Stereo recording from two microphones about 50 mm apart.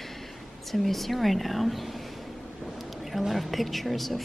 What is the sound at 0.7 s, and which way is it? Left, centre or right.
Speech, centre.